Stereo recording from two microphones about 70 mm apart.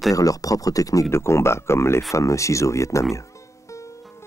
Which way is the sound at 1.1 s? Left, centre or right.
Left.